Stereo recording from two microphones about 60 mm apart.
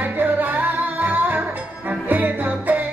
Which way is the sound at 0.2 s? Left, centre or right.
Right.